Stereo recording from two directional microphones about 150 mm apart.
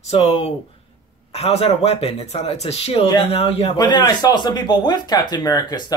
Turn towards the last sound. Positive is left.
turn(degrees=25)  # may be behind; listen again after turning